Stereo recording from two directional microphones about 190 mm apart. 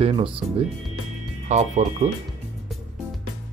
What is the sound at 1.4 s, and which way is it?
Speech, 40° right (ahead or behind).